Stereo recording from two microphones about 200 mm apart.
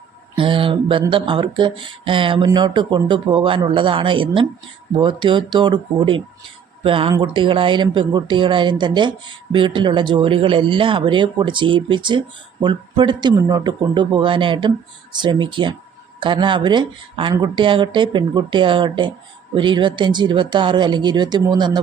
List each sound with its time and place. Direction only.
0.3 s speech: 25° right (ahead or behind)